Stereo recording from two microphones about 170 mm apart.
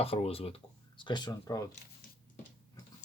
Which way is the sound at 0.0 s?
35° left (ahead or behind).